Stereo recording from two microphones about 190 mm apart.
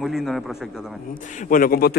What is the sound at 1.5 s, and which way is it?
Speech, 50° left (ahead or behind).